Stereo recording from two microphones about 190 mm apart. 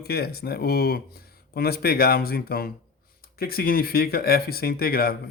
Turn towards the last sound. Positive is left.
turn(degrees=55)  # may be behind; listen again after turning